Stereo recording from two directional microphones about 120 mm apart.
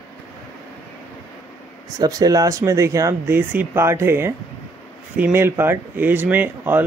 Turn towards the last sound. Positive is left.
turn(degrees=-15)  # may be behind; listen again after turning